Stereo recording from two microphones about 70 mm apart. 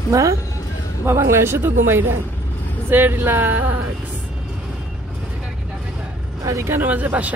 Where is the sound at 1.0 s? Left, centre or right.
Right.